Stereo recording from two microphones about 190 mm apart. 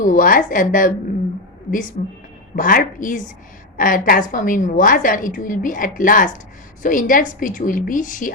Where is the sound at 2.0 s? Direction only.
45° left (ahead or behind).